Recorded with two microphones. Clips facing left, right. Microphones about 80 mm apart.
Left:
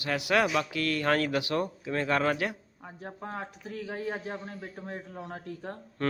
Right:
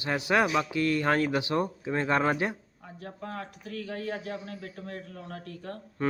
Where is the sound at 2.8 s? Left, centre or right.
Left.